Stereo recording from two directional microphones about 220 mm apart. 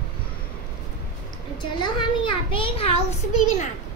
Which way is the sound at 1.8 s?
20° left (ahead or behind).